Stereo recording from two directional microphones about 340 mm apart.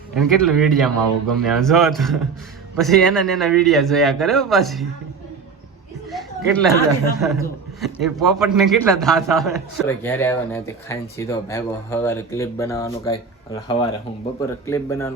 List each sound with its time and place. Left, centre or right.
0.1 s a man's voice: centre
6.1 s a sound: centre
7.2 s a man's voice: centre